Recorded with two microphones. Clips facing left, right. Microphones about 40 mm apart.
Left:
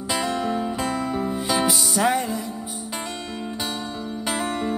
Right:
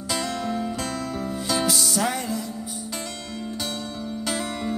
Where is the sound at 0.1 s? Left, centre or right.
Centre.